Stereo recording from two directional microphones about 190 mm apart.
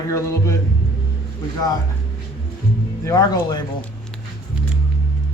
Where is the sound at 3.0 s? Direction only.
20° left (ahead or behind).